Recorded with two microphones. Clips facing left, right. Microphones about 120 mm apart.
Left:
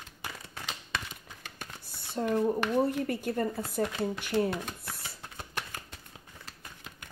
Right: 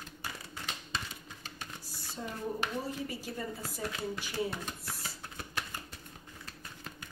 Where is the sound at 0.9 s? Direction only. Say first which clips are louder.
Left 3 dB; 65° left (ahead or behind).